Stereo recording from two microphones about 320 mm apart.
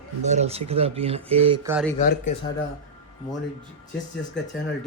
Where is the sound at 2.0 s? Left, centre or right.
Left.